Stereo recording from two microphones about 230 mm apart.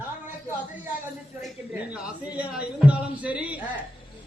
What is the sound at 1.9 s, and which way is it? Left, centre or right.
A man's voice, centre.